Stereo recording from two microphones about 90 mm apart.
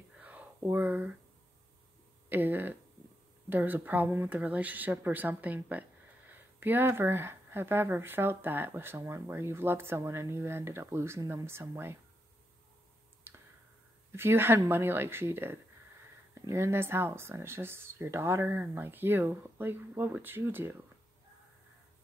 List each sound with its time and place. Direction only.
0.2 s a sound: 15° right (ahead or behind)
2.2 s speech: 20° right (ahead or behind)
13.3 s clicking: 25° right (ahead or behind)
14.1 s speech: 25° right (ahead or behind)